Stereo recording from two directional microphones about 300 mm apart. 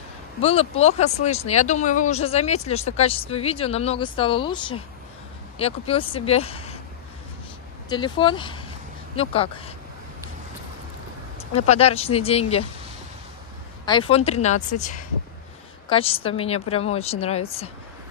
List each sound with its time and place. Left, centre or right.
0.4 s speech: centre
7.9 s speech: centre
11.6 s speech: left
13.8 s speech: centre